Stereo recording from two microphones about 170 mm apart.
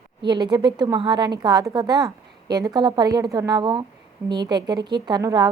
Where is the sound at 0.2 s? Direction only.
25° right (ahead or behind).